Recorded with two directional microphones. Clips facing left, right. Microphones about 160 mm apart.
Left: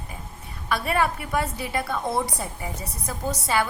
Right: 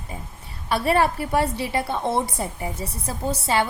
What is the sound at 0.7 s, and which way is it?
A woman's voice, 30° right (ahead or behind).